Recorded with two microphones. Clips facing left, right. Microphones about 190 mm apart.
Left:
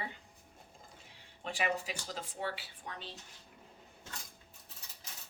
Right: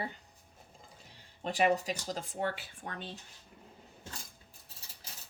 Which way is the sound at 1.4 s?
40° right (ahead or behind).